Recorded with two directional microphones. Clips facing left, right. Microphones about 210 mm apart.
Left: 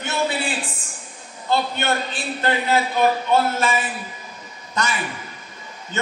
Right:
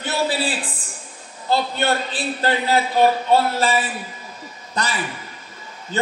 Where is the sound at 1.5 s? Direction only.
35° right (ahead or behind).